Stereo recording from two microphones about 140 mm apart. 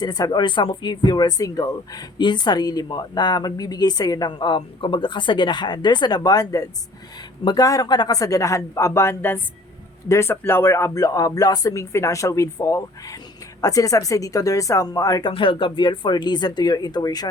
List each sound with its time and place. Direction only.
0.0 s speech: 30° left (ahead or behind)
15.3 s speech: 40° left (ahead or behind)